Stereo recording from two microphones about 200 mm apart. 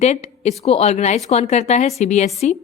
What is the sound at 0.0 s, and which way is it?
A woman's voice, 35° left (ahead or behind).